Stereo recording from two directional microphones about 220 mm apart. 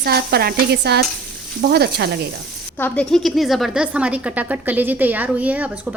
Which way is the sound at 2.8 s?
5° left (ahead or behind).